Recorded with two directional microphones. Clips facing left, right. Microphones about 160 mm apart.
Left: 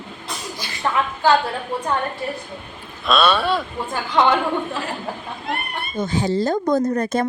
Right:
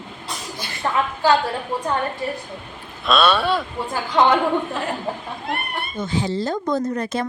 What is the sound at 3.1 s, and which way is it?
Speech, centre (ahead or behind).